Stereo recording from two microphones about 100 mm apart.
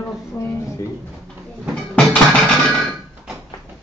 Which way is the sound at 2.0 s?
5° left (ahead or behind).